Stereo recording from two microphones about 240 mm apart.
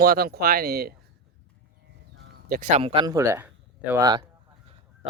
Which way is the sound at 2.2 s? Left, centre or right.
Right.